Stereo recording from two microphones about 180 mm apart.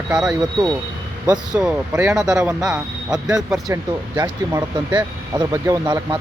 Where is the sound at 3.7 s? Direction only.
15° right (ahead or behind).